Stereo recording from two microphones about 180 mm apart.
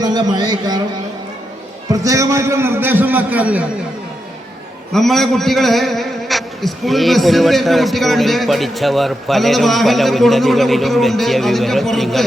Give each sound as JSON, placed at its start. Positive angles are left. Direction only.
{"t": 0.0, "sound": "a man's voice", "side_deg": -25}
{"t": 1.9, "sound": "a man's voice", "side_deg": -20}
{"t": 4.9, "sound": "a man's voice", "side_deg": 0}